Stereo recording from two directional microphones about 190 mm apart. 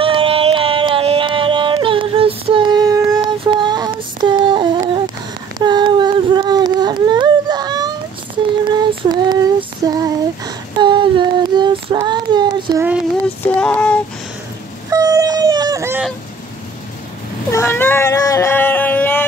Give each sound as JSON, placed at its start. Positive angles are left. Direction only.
{"t": 0.0, "sound": "music", "side_deg": -30}
{"t": 5.6, "sound": "a sound", "side_deg": -25}
{"t": 8.6, "sound": "child singing", "side_deg": -20}
{"t": 13.4, "sound": "child singing", "side_deg": 10}
{"t": 14.9, "sound": "vehicle", "side_deg": -20}
{"t": 17.5, "sound": "cat", "side_deg": 15}